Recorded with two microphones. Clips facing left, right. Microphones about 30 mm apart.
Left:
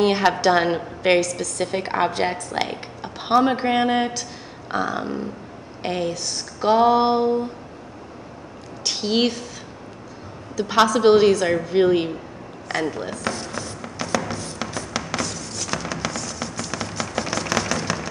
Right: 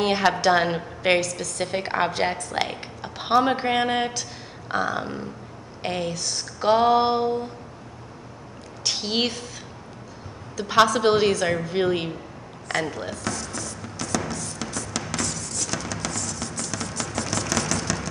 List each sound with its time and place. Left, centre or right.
0.0 s a woman's voice: centre
8.8 s a woman's voice: centre
10.5 s a woman's voice: centre
13.2 s music: left